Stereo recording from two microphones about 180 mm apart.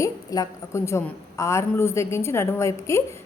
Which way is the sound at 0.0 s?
20° left (ahead or behind).